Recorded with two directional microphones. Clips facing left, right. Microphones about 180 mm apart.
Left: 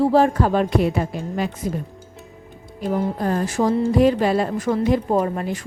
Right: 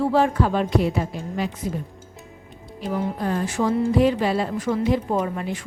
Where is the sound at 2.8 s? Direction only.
45° left (ahead or behind).